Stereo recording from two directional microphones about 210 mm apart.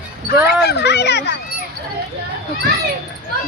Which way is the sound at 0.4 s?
50° left (ahead or behind).